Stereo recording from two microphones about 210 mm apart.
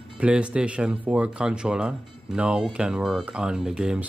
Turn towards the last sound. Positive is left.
turn(degrees=-5)  # may be behind; listen again after turning